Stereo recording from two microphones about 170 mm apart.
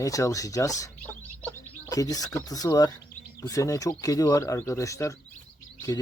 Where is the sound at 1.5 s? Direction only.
15° left (ahead or behind).